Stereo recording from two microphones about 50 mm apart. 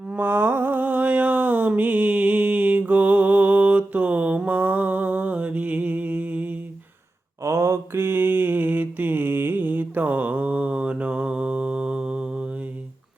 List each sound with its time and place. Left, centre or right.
0.2 s mantra: right
7.4 s mantra: right
7.9 s mantra: right; by 12.5 s centre